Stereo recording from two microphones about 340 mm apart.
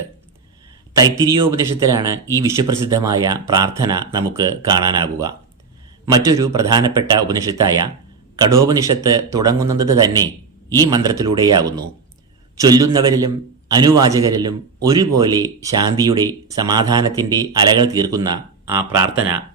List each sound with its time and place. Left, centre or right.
1.2 s a man's voice: centre